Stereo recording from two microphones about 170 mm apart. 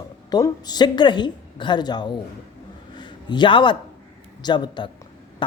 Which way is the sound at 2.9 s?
25° left (ahead or behind).